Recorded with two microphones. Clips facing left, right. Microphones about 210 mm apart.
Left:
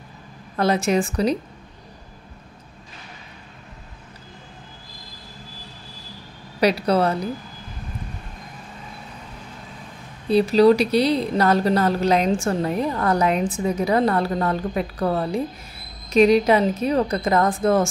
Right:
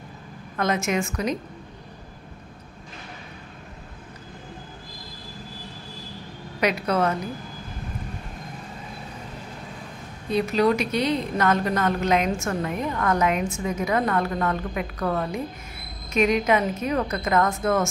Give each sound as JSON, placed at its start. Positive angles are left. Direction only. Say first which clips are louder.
{"t": 0.6, "sound": "a woman's voice", "louder": "left 5 dB", "side_deg": 35}
{"t": 6.6, "sound": "a woman's voice", "louder": "left 4 dB", "side_deg": 35}
{"t": 10.3, "sound": "a woman's voice", "louder": "left 6 dB", "side_deg": 35}